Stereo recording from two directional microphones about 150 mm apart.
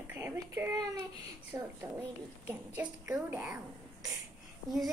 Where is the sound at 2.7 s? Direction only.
10° right (ahead or behind).